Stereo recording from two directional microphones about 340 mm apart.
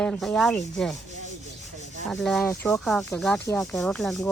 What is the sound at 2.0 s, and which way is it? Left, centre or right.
Rub, centre.